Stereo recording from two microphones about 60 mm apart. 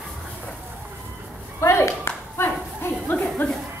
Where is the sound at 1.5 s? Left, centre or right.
Left.